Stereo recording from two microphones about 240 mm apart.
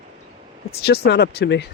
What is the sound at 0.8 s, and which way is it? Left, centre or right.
Speech, left.